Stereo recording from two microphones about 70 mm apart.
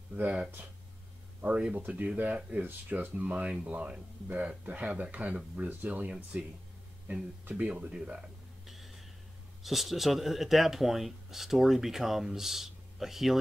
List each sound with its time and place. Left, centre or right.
0.1 s speech: right
1.8 s speech: right
3.3 s speech: centre
8.6 s a sound: centre
9.6 s speech: centre